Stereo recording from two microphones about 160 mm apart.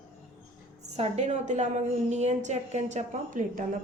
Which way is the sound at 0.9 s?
45° right (ahead or behind).